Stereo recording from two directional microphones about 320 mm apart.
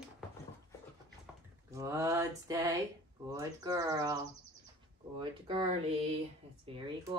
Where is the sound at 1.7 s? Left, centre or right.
Centre.